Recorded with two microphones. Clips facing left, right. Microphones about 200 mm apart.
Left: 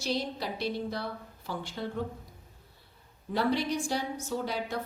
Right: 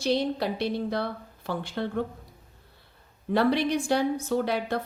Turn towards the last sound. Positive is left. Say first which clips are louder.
# right 6 dB
turn(degrees=-65)  # may be behind; listen again after turning